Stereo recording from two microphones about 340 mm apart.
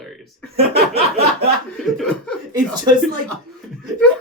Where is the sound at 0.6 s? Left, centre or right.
Right.